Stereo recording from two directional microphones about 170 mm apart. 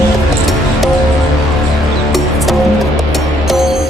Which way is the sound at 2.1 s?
Centre (ahead or behind).